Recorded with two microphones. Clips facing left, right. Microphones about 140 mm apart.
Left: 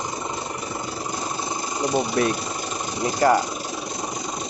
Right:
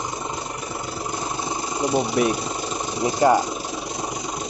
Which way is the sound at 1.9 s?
10° right (ahead or behind).